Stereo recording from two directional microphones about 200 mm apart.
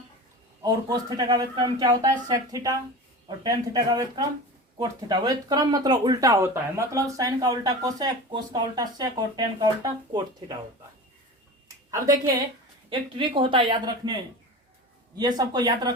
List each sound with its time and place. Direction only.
0.6 s speech: 20° right (ahead or behind)
11.9 s a woman's voice: 15° right (ahead or behind)
15.2 s speech: 20° right (ahead or behind)